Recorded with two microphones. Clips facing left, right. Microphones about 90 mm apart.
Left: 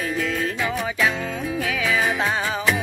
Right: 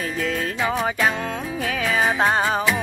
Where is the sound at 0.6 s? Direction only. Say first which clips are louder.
Right 2 dB; 40° right (ahead or behind).